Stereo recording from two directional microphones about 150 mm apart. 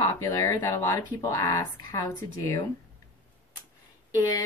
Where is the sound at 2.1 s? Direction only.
20° left (ahead or behind).